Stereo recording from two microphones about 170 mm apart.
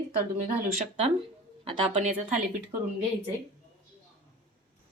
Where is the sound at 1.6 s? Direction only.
35° right (ahead or behind).